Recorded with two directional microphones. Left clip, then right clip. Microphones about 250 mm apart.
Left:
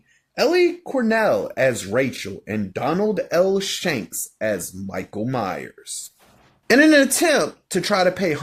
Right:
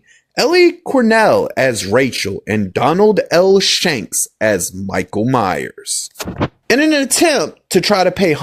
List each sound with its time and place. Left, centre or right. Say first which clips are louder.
0.3 s speech: right 6 dB; right